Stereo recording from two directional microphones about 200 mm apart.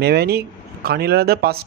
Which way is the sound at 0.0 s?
55° right (ahead or behind).